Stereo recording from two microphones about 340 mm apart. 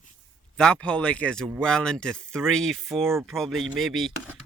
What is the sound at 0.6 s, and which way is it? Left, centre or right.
Speech, centre.